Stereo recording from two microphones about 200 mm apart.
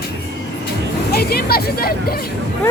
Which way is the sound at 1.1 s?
50° left (ahead or behind).